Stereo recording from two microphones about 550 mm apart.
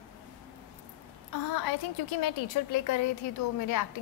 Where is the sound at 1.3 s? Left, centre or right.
Left.